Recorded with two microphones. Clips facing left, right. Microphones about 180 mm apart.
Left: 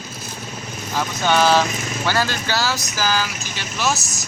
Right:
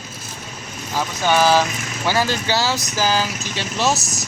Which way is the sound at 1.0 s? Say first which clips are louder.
Right 1 dB; 5° right (ahead or behind).